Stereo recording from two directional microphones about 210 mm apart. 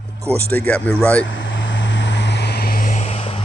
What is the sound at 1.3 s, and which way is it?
Vehicle, 60° left (ahead or behind).